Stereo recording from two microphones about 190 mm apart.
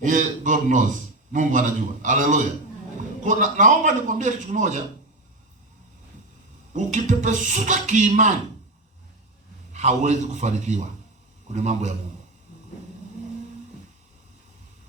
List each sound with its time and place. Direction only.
0.0 s a man's voice: 40° right (ahead or behind)
6.7 s a man's voice: 40° right (ahead or behind)
9.7 s a man's voice: 35° right (ahead or behind)